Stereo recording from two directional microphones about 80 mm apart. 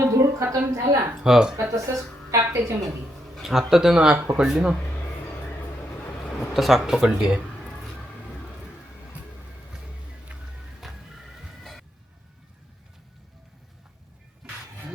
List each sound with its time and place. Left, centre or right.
0.0 s a sound: right
0.5 s a woman's voice: right
1.1 s speech: centre
1.7 s a woman's voice: right
3.3 s speech: centre
6.4 s speech: centre
10.3 s music: centre
10.8 s music: centre
14.4 s a sound: centre